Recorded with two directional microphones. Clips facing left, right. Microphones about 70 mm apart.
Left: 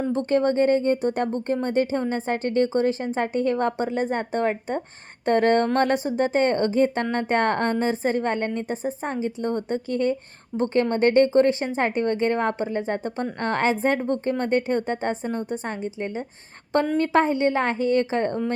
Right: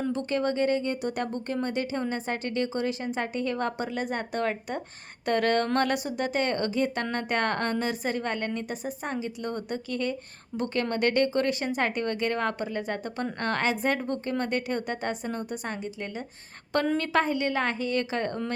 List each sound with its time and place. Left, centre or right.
0.1 s a woman's voice: left